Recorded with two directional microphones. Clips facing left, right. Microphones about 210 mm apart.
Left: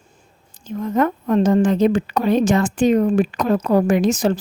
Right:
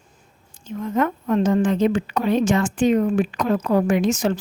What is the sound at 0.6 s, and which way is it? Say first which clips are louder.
A woman's voice: left 3 dB; 40° left (ahead or behind).